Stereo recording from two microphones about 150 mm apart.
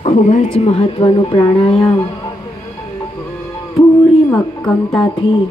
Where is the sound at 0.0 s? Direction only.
55° left (ahead or behind).